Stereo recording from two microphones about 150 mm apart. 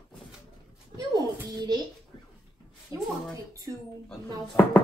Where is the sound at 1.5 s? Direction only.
25° right (ahead or behind).